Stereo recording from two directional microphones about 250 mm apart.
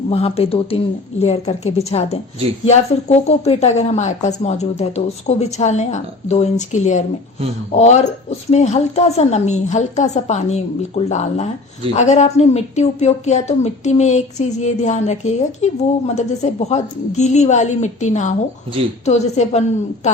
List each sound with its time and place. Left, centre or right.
0.1 s a woman's voice: left